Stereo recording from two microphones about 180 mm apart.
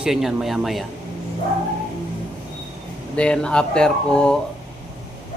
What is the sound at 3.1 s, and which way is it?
Speech, 5° left (ahead or behind).